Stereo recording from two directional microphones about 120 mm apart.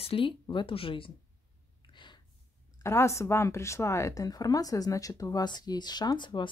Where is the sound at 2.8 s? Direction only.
25° left (ahead or behind).